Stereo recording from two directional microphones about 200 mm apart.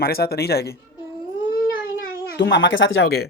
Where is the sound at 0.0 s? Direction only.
50° left (ahead or behind).